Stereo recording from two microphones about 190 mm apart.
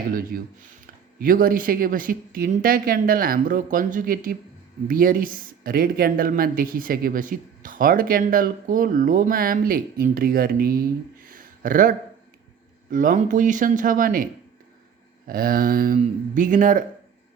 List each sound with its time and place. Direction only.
0.1 s speech: 50° right (ahead or behind)
11.3 s a sound: 45° right (ahead or behind)
12.9 s speech: 45° right (ahead or behind)
15.3 s speech: 50° right (ahead or behind)